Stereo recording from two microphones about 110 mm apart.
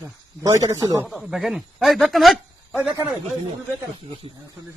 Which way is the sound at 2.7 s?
15° right (ahead or behind).